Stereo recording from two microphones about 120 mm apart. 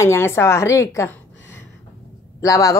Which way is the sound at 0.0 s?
20° left (ahead or behind).